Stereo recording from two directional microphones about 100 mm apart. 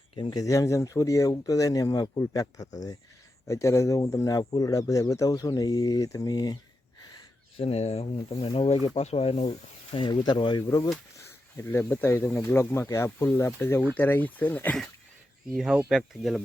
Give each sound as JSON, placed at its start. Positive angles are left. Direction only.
{"t": 0.2, "sound": "speech", "side_deg": 50}
{"t": 0.4, "sound": "speech", "side_deg": 35}
{"t": 7.1, "sound": "speech", "side_deg": 65}
{"t": 8.5, "sound": "speech", "side_deg": 75}
{"t": 9.0, "sound": "speech", "side_deg": 90}
{"t": 11.5, "sound": "speech", "side_deg": 25}
{"t": 15.5, "sound": "speech", "side_deg": -5}